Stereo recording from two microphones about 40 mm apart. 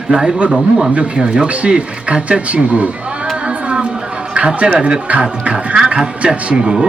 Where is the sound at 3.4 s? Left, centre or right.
Right.